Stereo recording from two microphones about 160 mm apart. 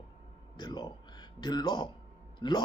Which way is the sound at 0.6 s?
25° left (ahead or behind).